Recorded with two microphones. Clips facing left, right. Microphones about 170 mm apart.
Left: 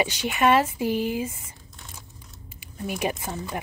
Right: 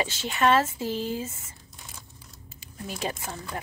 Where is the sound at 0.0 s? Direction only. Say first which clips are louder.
Left 2 dB; 15° left (ahead or behind).